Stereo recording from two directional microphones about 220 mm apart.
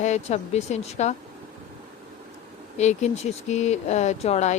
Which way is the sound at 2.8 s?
30° left (ahead or behind).